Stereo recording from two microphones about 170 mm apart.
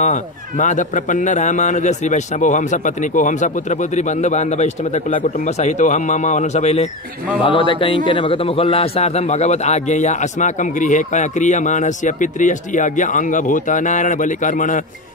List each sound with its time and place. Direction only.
0.0 s a man's voice: 45° left (ahead or behind)
7.4 s a man's voice: 30° left (ahead or behind); by 14.8 s 50° left (ahead or behind)